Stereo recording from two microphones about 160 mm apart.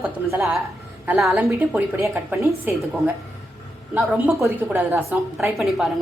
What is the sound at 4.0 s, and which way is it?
A woman's voice, 5° right (ahead or behind).